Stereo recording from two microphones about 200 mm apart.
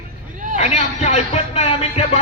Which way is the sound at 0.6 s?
35° left (ahead or behind).